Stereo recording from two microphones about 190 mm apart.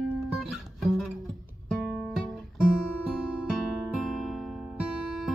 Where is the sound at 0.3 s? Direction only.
Centre (ahead or behind).